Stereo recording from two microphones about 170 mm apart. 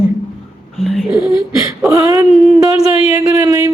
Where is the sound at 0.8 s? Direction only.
Centre (ahead or behind).